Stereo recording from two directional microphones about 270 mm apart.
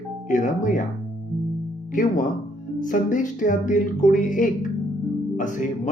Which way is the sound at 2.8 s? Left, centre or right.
Left.